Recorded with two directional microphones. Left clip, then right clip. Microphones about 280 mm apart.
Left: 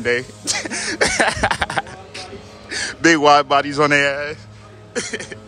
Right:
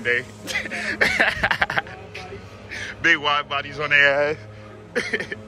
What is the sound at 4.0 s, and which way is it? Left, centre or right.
Speech, centre.